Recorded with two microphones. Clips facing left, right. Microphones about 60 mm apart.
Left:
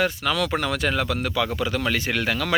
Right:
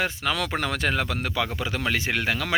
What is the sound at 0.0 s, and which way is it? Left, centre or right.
Speech, right.